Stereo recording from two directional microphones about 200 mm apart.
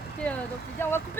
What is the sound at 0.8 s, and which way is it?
Speech, 10° left (ahead or behind).